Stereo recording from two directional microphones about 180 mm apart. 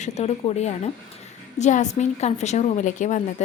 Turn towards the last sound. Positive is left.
turn(degrees=45)  # may be behind; listen again after turning